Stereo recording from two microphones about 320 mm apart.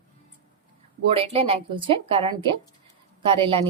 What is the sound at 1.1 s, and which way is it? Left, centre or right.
Speech, centre.